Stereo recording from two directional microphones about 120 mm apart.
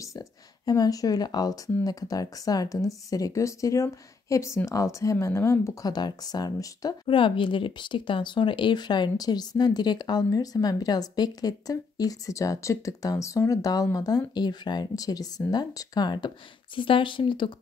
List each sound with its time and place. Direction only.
0.0 s speech: 30° left (ahead or behind)
7.1 s speech: 45° left (ahead or behind)